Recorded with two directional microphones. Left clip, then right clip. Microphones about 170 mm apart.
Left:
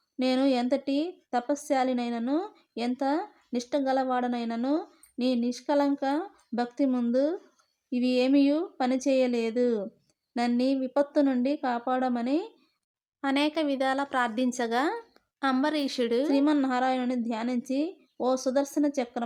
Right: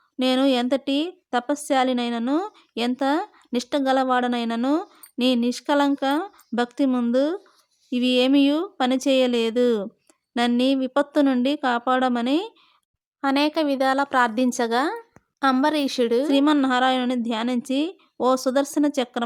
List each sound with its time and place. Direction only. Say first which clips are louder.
0.2 s a woman's voice: right 5 dB; 20° right (ahead or behind)